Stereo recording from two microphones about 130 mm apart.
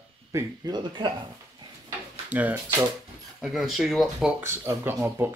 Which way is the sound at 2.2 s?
10° right (ahead or behind).